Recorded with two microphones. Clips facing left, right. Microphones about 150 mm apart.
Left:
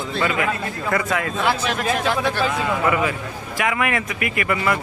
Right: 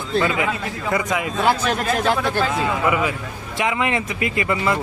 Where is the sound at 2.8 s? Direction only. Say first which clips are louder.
Even; 15° right (ahead or behind).